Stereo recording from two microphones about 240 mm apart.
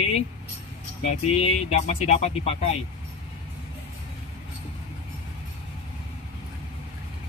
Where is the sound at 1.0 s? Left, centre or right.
Left.